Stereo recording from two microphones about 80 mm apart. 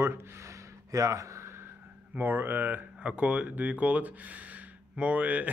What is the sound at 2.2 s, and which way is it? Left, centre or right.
Speech, right.